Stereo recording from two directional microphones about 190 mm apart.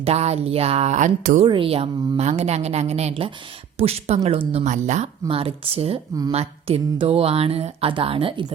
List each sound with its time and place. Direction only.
0.0 s speech: 35° right (ahead or behind)
1.5 s speech: 30° right (ahead or behind)